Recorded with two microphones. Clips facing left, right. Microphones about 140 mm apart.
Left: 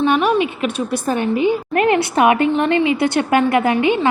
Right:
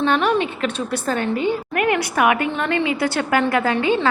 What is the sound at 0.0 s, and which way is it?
A woman's voice, 10° left (ahead or behind).